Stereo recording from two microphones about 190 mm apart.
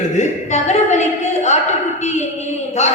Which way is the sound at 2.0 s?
35° left (ahead or behind).